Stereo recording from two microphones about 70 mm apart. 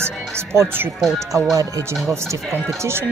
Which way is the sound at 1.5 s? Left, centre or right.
Right.